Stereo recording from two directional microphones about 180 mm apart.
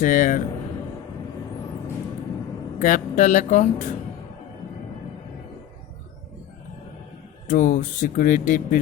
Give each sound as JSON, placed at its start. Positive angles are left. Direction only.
{"t": 0.0, "sound": "speech", "side_deg": 45}
{"t": 2.7, "sound": "speech", "side_deg": 45}
{"t": 7.4, "sound": "speech", "side_deg": 45}